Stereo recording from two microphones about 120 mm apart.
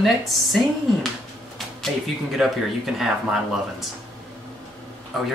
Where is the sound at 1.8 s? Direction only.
Centre (ahead or behind).